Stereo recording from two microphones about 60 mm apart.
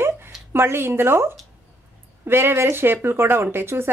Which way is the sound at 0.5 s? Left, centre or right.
Right.